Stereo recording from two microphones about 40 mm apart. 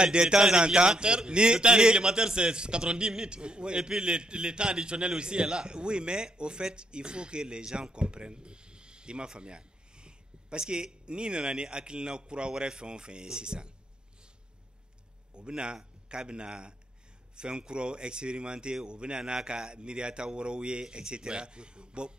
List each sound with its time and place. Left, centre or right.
0.0 s a man's voice: right
15.3 s a man's voice: right